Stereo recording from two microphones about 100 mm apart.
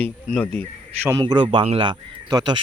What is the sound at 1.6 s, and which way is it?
Speech, 75° right (ahead or behind).